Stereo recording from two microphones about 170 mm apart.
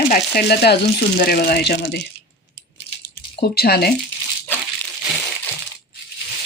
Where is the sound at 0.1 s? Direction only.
65° left (ahead or behind).